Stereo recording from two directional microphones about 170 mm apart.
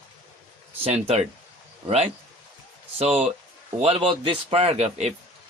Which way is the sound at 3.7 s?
35° right (ahead or behind).